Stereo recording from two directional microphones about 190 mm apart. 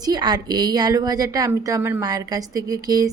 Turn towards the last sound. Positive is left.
turn(degrees=-20)  # may be behind; listen again after turning